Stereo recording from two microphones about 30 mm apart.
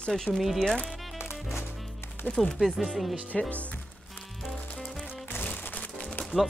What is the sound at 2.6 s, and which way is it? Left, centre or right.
Speech, centre.